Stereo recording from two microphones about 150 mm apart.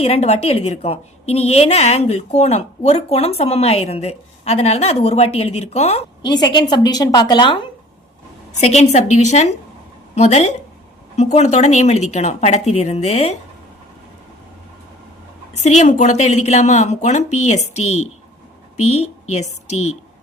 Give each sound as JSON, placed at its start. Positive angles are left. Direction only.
{"t": 0.0, "sound": "a woman's voice", "side_deg": 45}
{"t": 6.2, "sound": "a woman's voice", "side_deg": 30}
{"t": 8.6, "sound": "a woman's voice", "side_deg": 45}
{"t": 15.6, "sound": "a woman's voice", "side_deg": 50}